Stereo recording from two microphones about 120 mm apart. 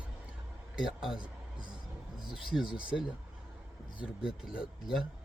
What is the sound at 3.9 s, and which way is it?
Speech, 45° left (ahead or behind).